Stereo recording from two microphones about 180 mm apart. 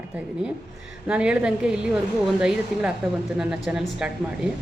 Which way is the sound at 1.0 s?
5° right (ahead or behind).